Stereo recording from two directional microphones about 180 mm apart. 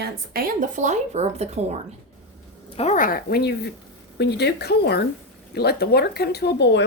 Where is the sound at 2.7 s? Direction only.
40° left (ahead or behind); by 6.8 s 75° left (ahead or behind).